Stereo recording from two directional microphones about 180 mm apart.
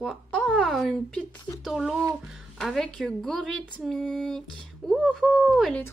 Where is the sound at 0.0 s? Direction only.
Centre (ahead or behind).